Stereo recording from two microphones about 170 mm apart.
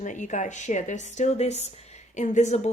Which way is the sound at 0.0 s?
45° left (ahead or behind).